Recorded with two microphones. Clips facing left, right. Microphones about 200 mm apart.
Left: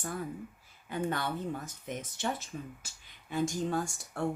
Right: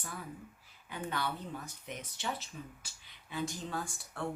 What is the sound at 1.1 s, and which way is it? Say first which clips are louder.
Speech: left 4 dB; 50° left (ahead or behind).